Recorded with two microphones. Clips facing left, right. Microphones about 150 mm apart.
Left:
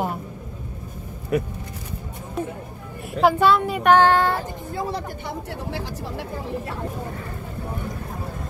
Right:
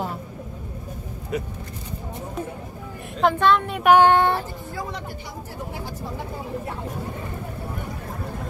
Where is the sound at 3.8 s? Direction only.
15° right (ahead or behind).